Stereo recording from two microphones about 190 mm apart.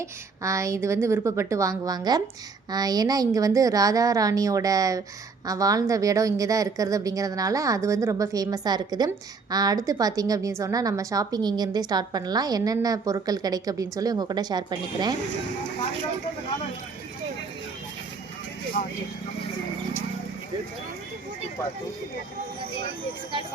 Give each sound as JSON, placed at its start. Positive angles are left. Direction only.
{"t": 0.0, "sound": "a woman's voice", "side_deg": -15}
{"t": 18.8, "sound": "speech", "side_deg": 50}